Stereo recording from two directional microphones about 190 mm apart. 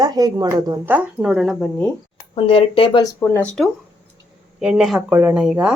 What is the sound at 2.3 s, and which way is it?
Speech, 30° left (ahead or behind).